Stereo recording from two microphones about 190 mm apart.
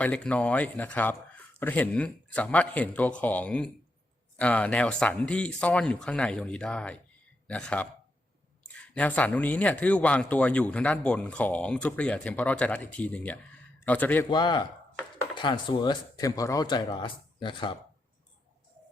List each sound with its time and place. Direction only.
0.0 s speech: 5° left (ahead or behind)
14.3 s speech: 20° left (ahead or behind)